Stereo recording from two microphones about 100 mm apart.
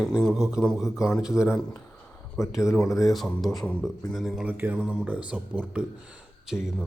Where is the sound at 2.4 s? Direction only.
35° left (ahead or behind).